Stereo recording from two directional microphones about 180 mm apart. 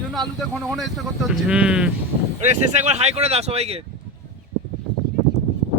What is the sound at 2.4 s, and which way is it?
Speech, 40° right (ahead or behind).